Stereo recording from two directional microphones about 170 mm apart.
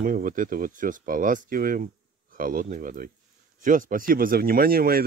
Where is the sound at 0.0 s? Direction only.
55° right (ahead or behind).